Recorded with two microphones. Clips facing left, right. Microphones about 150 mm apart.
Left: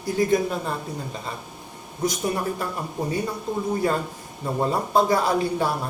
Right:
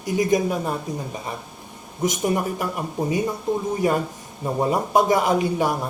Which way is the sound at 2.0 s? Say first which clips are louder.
Right 3 dB; 20° right (ahead or behind).